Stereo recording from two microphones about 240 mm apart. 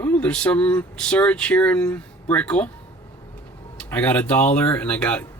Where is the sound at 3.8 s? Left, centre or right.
Centre.